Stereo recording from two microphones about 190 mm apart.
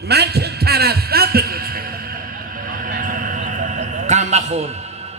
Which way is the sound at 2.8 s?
50° right (ahead or behind).